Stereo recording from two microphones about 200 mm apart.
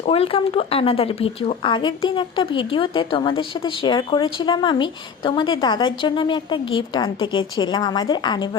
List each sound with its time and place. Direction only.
0.0 s speech: 30° left (ahead or behind)